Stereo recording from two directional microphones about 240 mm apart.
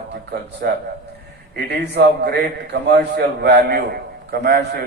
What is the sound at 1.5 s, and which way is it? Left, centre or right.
A man's voice, right.